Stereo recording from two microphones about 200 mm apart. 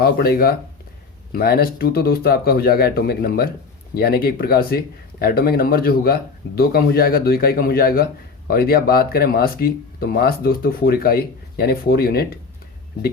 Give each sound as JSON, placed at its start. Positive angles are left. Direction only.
{"t": 0.0, "sound": "speech", "side_deg": 50}